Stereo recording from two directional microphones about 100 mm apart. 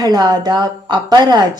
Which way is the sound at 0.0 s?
40° right (ahead or behind).